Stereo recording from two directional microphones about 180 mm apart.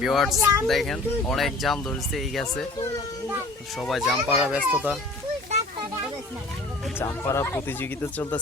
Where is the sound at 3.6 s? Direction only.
Centre (ahead or behind).